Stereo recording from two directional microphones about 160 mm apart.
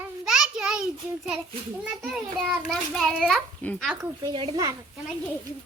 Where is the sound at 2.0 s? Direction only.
Centre (ahead or behind).